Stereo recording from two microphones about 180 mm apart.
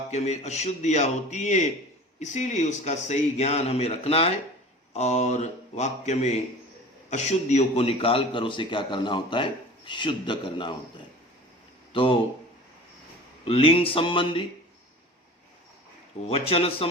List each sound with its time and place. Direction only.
0.1 s a man's voice: 40° left (ahead or behind)
13.4 s a man's voice: 30° left (ahead or behind)
16.3 s speech: 30° left (ahead or behind)